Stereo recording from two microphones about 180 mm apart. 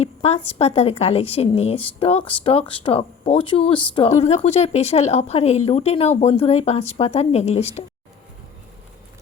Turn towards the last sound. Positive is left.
turn(degrees=35)  # may be behind; listen again after turning